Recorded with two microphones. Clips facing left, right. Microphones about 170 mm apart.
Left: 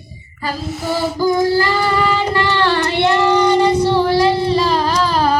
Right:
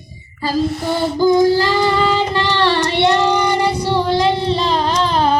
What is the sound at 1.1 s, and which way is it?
Child singing, 20° right (ahead or behind).